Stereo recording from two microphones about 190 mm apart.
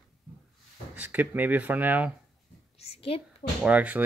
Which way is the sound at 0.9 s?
10° right (ahead or behind).